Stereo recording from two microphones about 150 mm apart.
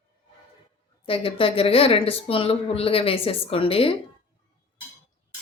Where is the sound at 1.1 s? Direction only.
40° left (ahead or behind).